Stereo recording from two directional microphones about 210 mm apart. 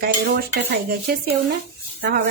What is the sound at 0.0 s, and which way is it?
A woman's voice, 50° right (ahead or behind).